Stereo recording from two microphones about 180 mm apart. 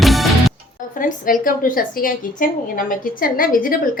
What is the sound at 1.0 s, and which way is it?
A woman's voice, 50° left (ahead or behind).